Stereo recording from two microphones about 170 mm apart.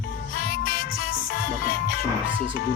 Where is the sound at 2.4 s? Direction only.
90° left.